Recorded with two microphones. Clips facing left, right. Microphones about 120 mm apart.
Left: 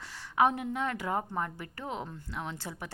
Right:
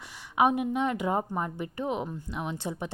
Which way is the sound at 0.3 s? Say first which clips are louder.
Right 3 dB; 15° right (ahead or behind).